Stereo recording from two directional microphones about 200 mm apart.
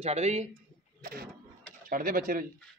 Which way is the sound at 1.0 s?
45° right (ahead or behind).